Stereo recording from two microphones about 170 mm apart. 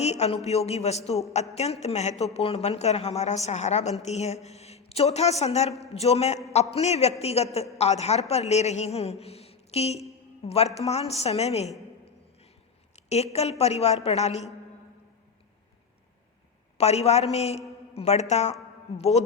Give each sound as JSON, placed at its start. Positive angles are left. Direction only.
{"t": 0.0, "sound": "a woman's voice", "side_deg": 40}
{"t": 13.1, "sound": "a woman's voice", "side_deg": 40}
{"t": 16.7, "sound": "a woman's voice", "side_deg": 40}